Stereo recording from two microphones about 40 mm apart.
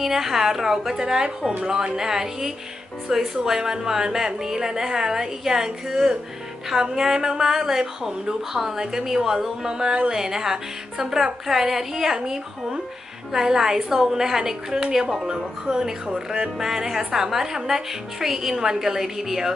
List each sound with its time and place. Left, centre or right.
0.0 s speech: centre; by 10.1 s right
10.1 s speech: centre
16.6 s speech: centre